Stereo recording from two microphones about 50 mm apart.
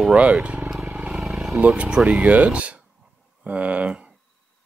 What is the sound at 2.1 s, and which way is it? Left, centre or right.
Speech, right.